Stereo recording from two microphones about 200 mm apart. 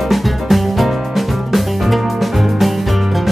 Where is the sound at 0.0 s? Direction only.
Centre (ahead or behind).